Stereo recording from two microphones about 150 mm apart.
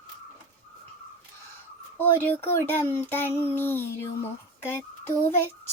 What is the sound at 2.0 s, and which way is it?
Speech, 15° left (ahead or behind).